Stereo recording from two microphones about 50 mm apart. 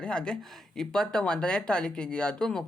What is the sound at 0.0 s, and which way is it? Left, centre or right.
Speech, centre.